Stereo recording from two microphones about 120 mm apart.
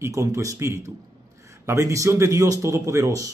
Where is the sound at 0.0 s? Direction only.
25° right (ahead or behind).